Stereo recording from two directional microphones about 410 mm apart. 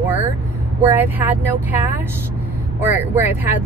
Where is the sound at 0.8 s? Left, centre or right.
Centre.